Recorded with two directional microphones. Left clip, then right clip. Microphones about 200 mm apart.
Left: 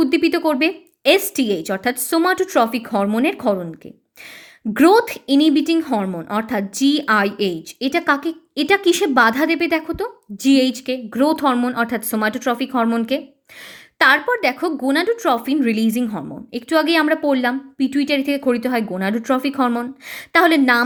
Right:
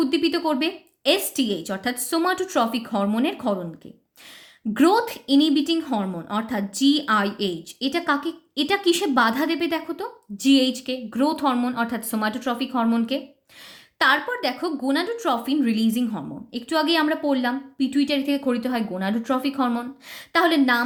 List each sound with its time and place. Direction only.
0.0 s a woman's voice: 30° left (ahead or behind)
4.7 s a woman's voice: 30° left (ahead or behind)